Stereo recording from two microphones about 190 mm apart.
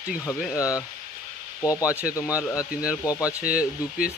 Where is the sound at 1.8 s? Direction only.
5° right (ahead or behind).